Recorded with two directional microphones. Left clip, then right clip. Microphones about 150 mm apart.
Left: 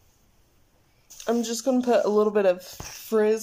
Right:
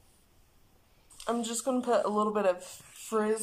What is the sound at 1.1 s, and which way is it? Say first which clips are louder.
Speech: left 6 dB; 35° left (ahead or behind).